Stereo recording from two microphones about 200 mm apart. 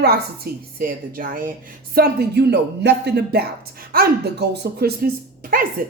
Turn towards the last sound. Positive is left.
turn(degrees=-45)  # may be behind; listen again after turning